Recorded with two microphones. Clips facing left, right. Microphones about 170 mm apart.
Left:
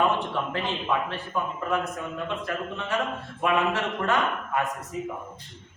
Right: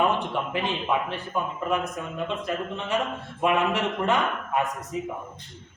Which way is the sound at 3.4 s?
20° right (ahead or behind).